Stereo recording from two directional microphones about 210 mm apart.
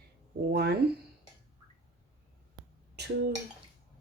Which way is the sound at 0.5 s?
50° right (ahead or behind).